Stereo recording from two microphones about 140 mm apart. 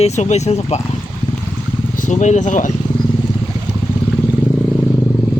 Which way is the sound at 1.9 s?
65° left (ahead or behind).